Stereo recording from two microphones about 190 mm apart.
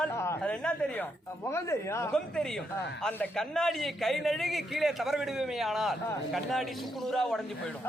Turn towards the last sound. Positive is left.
turn(degrees=0)  # may be behind; listen again after turning